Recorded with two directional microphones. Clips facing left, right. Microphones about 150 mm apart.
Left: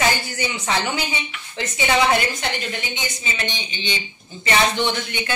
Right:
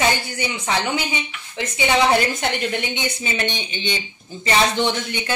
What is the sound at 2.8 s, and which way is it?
A woman's voice, 65° right (ahead or behind).